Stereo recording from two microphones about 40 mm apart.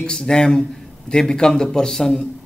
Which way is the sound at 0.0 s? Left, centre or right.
Centre.